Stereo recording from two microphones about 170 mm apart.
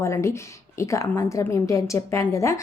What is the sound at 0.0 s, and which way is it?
A woman's voice, 15° left (ahead or behind).